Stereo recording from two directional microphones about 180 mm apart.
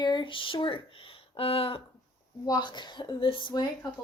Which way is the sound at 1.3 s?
30° left (ahead or behind).